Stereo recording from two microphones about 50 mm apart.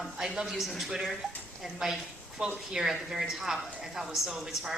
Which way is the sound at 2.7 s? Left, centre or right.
Centre.